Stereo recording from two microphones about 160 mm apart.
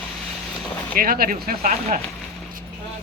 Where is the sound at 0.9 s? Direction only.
65° right (ahead or behind).